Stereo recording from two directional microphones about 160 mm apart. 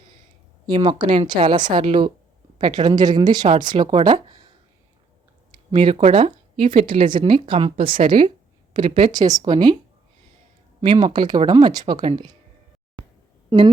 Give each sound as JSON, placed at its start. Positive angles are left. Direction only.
{"t": 0.7, "sound": "speech", "side_deg": -30}
{"t": 5.7, "sound": "speech", "side_deg": -30}
{"t": 10.8, "sound": "speech", "side_deg": -30}
{"t": 13.5, "sound": "a woman's voice", "side_deg": -25}